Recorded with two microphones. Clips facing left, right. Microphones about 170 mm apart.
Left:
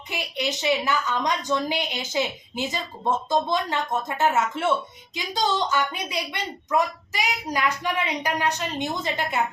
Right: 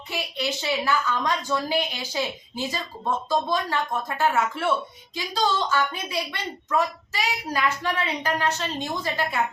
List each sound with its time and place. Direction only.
0.1 s a woman's voice: 20° left (ahead or behind)